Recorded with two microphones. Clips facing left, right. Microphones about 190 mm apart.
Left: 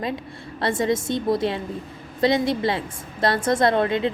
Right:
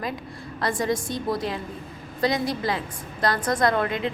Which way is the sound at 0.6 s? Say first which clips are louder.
Left 3 dB; 25° left (ahead or behind).